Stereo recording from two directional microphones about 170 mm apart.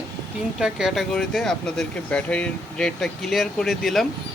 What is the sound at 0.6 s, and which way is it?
Speech, centre (ahead or behind).